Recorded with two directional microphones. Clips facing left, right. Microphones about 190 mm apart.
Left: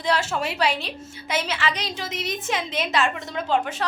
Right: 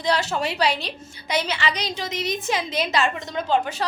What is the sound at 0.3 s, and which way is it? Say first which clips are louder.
A woman's voice: right 1 dB; centre (ahead or behind).